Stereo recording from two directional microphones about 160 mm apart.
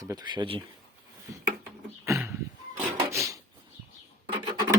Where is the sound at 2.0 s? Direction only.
15° right (ahead or behind).